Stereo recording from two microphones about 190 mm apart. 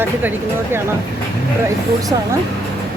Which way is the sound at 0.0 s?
10° right (ahead or behind).